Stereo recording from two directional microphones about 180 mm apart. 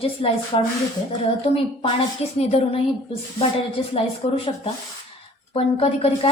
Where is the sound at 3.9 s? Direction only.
30° left (ahead or behind).